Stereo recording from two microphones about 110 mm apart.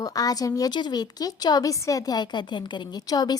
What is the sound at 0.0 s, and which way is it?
A woman's voice, 35° left (ahead or behind).